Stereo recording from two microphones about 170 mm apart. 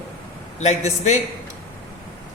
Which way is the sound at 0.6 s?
40° left (ahead or behind).